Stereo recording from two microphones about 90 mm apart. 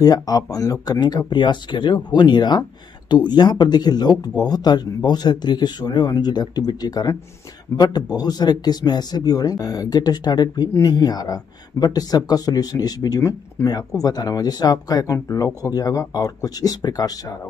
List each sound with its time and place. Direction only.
0.0 s speech: 45° left (ahead or behind)